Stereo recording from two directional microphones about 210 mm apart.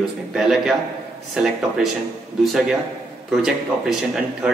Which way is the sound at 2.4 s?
Centre (ahead or behind).